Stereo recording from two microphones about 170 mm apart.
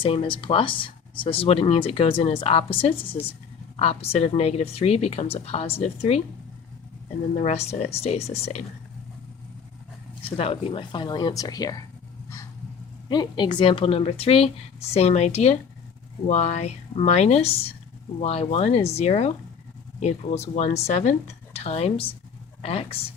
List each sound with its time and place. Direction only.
0.0 s speech: 30° left (ahead or behind)
7.3 s speech: 40° left (ahead or behind)
10.3 s speech: 35° left (ahead or behind)
13.1 s speech: 25° left (ahead or behind)